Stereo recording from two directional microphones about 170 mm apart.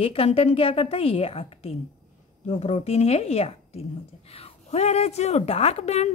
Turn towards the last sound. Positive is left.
turn(degrees=40)  # may be behind; listen again after turning